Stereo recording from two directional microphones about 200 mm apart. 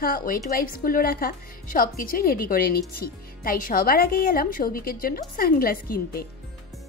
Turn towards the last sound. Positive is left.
turn(degrees=45)  # may be behind; listen again after turning